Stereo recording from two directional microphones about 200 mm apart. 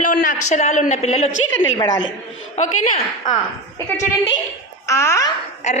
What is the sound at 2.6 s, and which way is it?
Speech, 30° left (ahead or behind).